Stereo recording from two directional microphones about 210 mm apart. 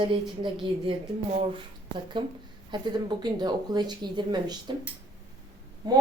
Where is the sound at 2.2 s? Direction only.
20° right (ahead or behind).